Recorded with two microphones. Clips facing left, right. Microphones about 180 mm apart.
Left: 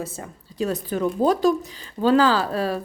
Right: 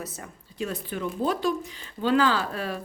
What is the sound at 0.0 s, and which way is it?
Speech, 25° left (ahead or behind).